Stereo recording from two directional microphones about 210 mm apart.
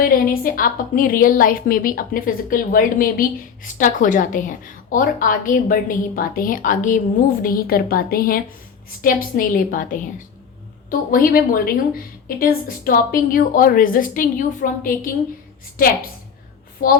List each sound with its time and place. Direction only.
0.0 s a woman's voice: 45° left (ahead or behind)
16.8 s a woman's voice: 40° left (ahead or behind)